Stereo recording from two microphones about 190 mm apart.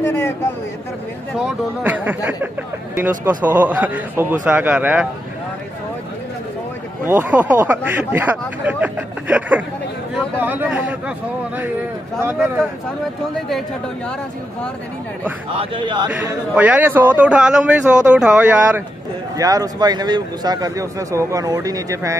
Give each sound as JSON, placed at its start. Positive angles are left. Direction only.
{"t": 0.0, "sound": "a sound", "side_deg": 10}
{"t": 1.3, "sound": "a man's voice", "side_deg": -5}
{"t": 7.1, "sound": "a man's voice", "side_deg": -10}
{"t": 15.5, "sound": "speech", "side_deg": -25}
{"t": 16.1, "sound": "a man's voice", "side_deg": -10}